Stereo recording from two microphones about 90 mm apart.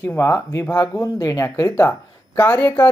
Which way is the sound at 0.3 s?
30° left (ahead or behind).